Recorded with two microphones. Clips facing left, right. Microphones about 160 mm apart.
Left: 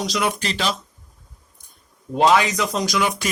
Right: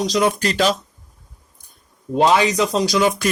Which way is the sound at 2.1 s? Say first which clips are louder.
Right 1 dB; 30° right (ahead or behind).